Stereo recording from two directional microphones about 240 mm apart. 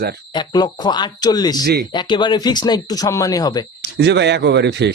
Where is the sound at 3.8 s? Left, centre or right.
Right.